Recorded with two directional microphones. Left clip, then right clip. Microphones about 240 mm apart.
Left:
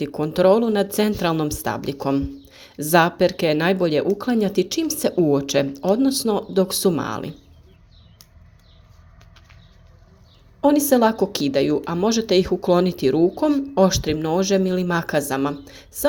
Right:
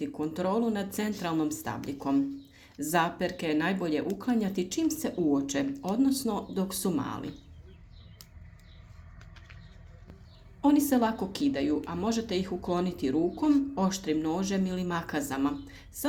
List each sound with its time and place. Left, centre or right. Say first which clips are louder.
0.0 s speech: left 14 dB; left
10.6 s speech: left 9 dB; left